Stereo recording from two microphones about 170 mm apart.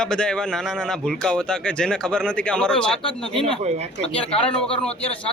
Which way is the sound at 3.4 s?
40° right (ahead or behind).